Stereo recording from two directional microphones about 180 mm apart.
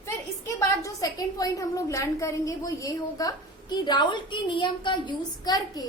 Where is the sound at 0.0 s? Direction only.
15° left (ahead or behind).